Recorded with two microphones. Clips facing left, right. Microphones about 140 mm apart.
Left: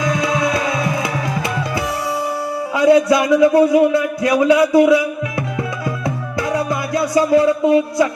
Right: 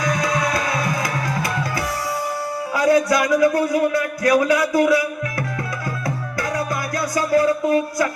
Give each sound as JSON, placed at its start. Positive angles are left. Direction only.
{"t": 0.0, "sound": "music", "side_deg": 25}
{"t": 2.7, "sound": "a man's voice", "side_deg": 25}
{"t": 6.5, "sound": "music", "side_deg": 25}